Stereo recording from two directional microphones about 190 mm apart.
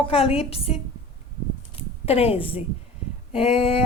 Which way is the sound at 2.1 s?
30° left (ahead or behind).